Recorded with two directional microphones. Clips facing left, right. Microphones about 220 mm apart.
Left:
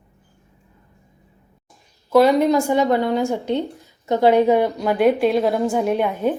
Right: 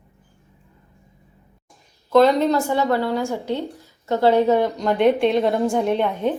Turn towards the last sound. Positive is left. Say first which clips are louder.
# left 1 dB
turn(degrees=10)  # may be behind; listen again after turning